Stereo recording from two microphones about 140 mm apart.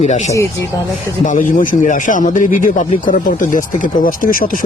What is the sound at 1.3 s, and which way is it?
Speech, 70° left (ahead or behind).